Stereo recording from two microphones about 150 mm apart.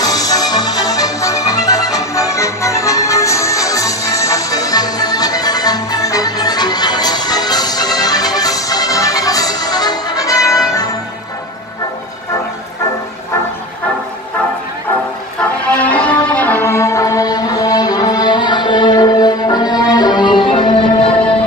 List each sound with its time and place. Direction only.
0.0 s music: 25° left (ahead or behind)
15.8 s music: 10° left (ahead or behind); by 21.1 s 30° left (ahead or behind)